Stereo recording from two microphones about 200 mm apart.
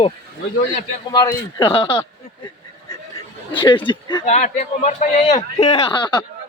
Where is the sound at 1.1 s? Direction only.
20° left (ahead or behind).